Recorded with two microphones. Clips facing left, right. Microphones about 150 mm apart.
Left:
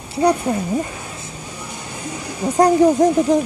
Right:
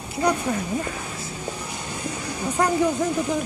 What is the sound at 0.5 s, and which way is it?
Speech, 30° left (ahead or behind).